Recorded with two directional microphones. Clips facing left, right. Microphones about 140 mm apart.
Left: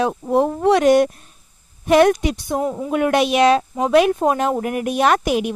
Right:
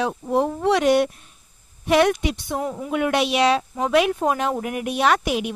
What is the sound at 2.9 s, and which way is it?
Speech, 45° left (ahead or behind).